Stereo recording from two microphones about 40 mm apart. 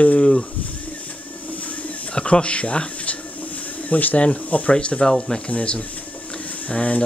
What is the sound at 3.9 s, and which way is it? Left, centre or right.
Speech, left.